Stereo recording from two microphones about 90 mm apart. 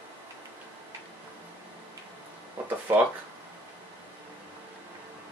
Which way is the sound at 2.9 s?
30° right (ahead or behind).